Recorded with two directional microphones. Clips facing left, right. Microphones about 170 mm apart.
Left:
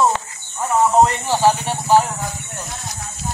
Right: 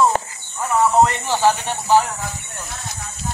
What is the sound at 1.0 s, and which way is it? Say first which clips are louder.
Speech: left 1 dB; 15° left (ahead or behind).